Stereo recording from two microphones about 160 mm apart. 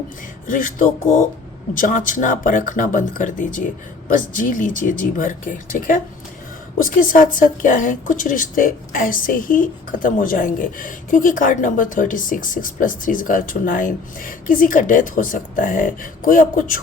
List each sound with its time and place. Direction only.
0.4 s a woman's voice: 60° left (ahead or behind)